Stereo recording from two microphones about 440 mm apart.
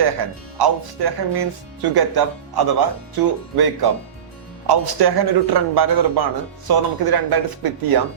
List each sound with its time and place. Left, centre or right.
0.0 s speech: right